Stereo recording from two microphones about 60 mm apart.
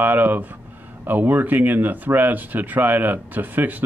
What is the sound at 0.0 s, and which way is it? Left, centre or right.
A man's voice, right.